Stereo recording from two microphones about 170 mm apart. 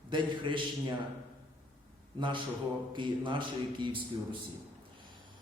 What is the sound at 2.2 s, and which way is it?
Speech, 30° right (ahead or behind).